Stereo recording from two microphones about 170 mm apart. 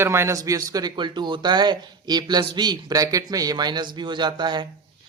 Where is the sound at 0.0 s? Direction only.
15° right (ahead or behind).